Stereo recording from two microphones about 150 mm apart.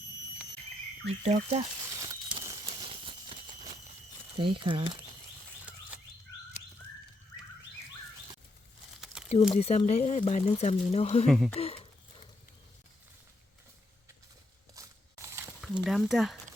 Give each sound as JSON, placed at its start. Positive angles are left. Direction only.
{"t": 1.0, "sound": "speech", "side_deg": -50}
{"t": 2.0, "sound": "a sound", "side_deg": -25}
{"t": 4.4, "sound": "speech", "side_deg": -35}
{"t": 9.1, "sound": "a sound", "side_deg": -5}
{"t": 9.5, "sound": "speech", "side_deg": 45}
{"t": 11.3, "sound": "speech", "side_deg": 5}
{"t": 11.5, "sound": "speech", "side_deg": 40}
{"t": 14.8, "sound": "a sound", "side_deg": -15}
{"t": 15.6, "sound": "speech", "side_deg": -5}